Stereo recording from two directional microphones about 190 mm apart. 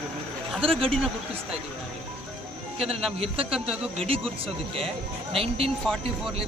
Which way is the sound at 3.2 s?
30° right (ahead or behind).